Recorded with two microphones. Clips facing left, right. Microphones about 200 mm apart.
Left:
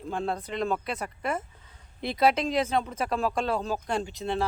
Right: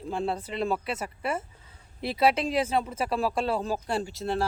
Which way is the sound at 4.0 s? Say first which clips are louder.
Right 1 dB; 45° right (ahead or behind).